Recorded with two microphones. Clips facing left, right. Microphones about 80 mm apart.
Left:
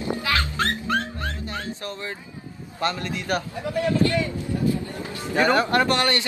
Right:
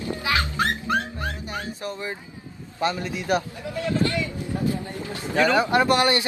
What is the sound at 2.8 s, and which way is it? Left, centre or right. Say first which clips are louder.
Speech: right 1 dB; centre.